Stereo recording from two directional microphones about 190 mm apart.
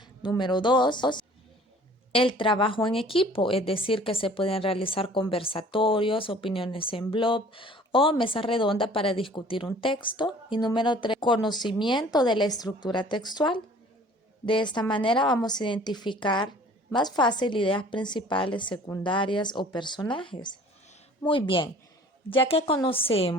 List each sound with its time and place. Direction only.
0.0 s speech: 25° left (ahead or behind)